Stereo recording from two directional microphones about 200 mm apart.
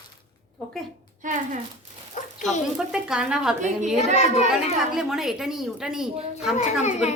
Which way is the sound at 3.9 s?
30° left (ahead or behind).